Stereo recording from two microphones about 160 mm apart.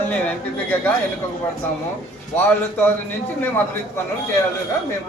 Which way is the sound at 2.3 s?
10° left (ahead or behind).